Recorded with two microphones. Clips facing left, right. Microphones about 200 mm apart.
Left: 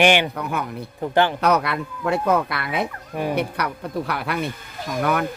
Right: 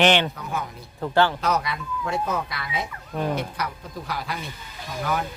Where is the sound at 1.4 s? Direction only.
60° left (ahead or behind).